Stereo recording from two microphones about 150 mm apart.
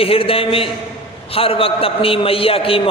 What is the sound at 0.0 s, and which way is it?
A man's voice, 40° left (ahead or behind).